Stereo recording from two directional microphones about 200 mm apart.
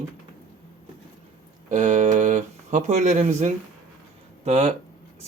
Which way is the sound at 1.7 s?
40° right (ahead or behind).